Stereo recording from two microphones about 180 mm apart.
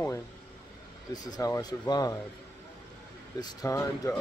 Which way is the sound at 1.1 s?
20° left (ahead or behind).